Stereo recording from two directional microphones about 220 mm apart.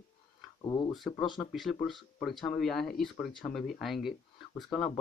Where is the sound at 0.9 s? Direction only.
Centre (ahead or behind).